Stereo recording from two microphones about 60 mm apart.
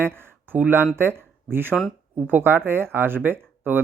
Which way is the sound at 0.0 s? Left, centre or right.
Right.